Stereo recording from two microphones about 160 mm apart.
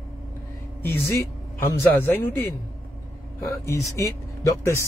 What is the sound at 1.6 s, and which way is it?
Speech, 15° left (ahead or behind).